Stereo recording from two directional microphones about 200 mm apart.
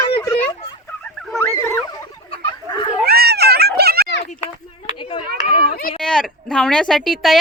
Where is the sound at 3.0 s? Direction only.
50° right (ahead or behind).